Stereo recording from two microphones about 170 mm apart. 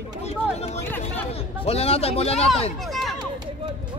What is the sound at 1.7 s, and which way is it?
Speech, 35° left (ahead or behind).